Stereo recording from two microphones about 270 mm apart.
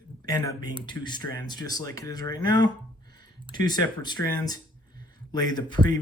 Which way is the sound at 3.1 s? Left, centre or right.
Centre.